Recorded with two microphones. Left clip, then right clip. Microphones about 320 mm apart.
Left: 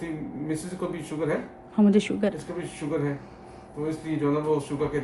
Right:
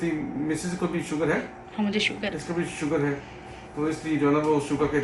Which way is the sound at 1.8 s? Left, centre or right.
Centre.